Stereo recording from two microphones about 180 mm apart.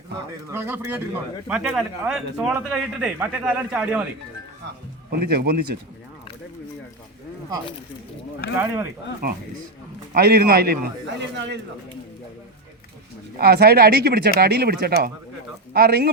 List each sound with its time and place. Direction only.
0.5 s speech: 10° right (ahead or behind)
5.2 s speech: 60° right (ahead or behind)
8.5 s speech: 15° right (ahead or behind)
9.2 s speech: 60° right (ahead or behind)
11.2 s speech: 75° right (ahead or behind)
13.4 s speech: 60° right (ahead or behind)